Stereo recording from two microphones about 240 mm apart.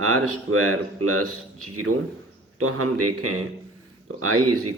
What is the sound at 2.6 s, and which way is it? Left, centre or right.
Speech, right.